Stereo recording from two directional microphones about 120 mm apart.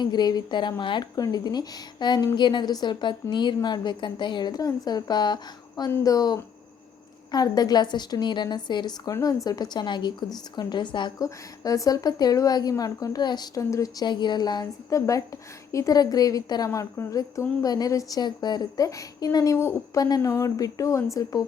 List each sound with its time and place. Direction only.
0.0 s speech: 35° left (ahead or behind)
11.2 s a woman's voice: 30° left (ahead or behind)